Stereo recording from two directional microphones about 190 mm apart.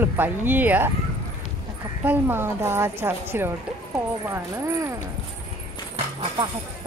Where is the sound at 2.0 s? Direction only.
10° right (ahead or behind).